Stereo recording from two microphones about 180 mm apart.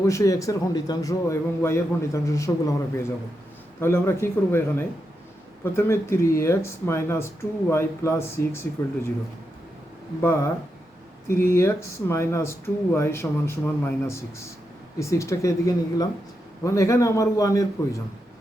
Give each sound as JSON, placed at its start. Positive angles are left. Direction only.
{"t": 0.0, "sound": "speech", "side_deg": 15}
{"t": 10.2, "sound": "speech", "side_deg": 10}